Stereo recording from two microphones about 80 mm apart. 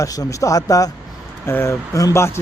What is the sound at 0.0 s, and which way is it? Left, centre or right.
Speech, left.